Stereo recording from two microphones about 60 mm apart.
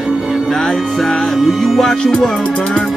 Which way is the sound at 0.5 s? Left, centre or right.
Centre.